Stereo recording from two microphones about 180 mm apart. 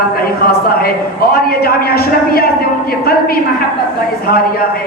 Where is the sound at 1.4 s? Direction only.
60° left (ahead or behind).